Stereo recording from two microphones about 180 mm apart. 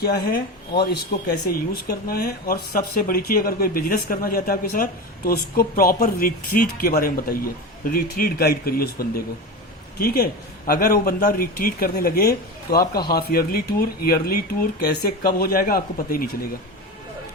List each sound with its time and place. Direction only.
0.0 s speech: 55° left (ahead or behind)